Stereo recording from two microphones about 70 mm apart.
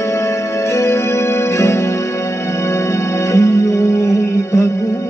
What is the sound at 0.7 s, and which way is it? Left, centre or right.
Music, left.